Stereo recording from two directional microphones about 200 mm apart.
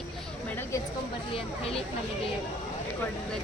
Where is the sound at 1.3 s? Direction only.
30° left (ahead or behind).